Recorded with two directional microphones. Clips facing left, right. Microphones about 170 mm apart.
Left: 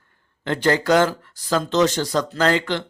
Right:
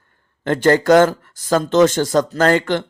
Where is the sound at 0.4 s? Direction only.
50° right (ahead or behind).